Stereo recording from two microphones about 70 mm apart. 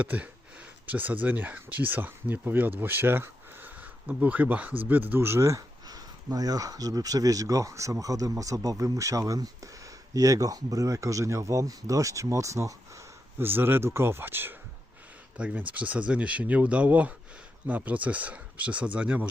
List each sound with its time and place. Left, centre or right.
0.0 s speech: right
5.9 s speech: right
13.4 s speech: right
15.5 s speech: right